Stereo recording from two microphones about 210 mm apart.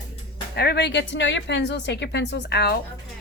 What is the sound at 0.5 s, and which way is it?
Speech, 50° left (ahead or behind).